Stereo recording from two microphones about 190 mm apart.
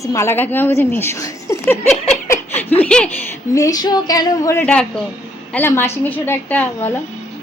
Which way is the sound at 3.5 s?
20° left (ahead or behind).